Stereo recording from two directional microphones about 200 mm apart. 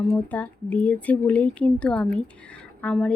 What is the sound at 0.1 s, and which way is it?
Speech, 5° left (ahead or behind).